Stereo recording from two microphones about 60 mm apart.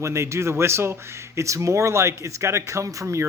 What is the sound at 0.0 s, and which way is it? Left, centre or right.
Speech, right.